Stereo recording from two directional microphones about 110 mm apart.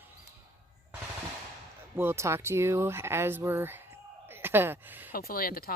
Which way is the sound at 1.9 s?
25° right (ahead or behind).